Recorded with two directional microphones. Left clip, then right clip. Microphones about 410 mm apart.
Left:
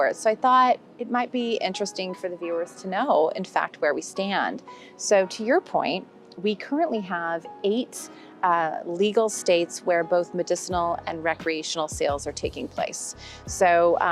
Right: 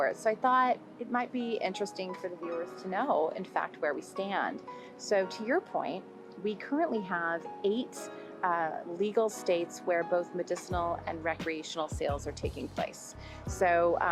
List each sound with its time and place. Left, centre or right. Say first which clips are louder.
0.0 s a woman's voice: left 7 dB; left
6.4 s speech: left 7 dB; left
8.4 s a woman's voice: left 8 dB; left